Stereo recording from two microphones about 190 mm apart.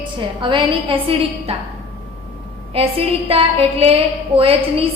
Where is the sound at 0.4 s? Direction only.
25° right (ahead or behind).